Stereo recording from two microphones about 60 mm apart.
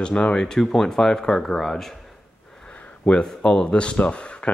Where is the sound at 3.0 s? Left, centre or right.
Centre.